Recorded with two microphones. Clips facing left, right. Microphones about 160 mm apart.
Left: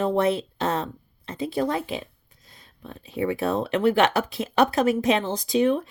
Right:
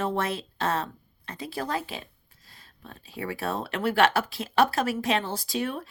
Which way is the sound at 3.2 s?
20° left (ahead or behind).